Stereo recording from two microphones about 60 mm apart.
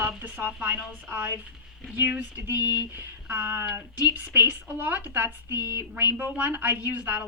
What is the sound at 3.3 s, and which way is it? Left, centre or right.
A woman's voice, right.